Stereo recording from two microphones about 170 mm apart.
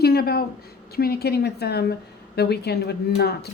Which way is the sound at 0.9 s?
65° left (ahead or behind).